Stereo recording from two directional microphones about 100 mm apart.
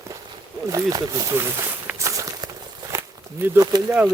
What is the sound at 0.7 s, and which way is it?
Speech, 35° right (ahead or behind).